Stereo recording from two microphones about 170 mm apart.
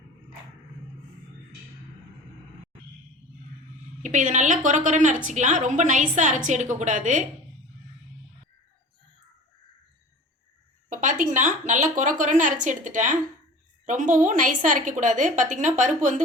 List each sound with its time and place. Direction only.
4.0 s a woman's voice: 45° right (ahead or behind)
10.8 s a woman's voice: 50° right (ahead or behind)